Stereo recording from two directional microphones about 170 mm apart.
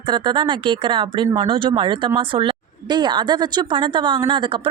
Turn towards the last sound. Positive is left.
turn(degrees=-30)  # may be behind; listen again after turning